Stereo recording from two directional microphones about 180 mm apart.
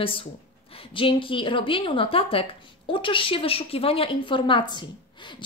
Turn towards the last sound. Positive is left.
turn(degrees=25)  # may be behind; listen again after turning